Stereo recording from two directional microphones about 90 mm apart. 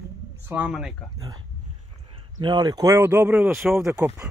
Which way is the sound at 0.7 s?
5° right (ahead or behind).